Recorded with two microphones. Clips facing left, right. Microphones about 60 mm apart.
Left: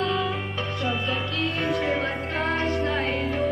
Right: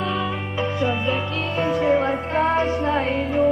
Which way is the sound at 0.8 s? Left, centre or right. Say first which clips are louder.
Right 4 dB; centre.